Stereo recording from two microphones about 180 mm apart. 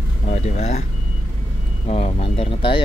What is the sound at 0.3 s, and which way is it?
Speech, 40° left (ahead or behind).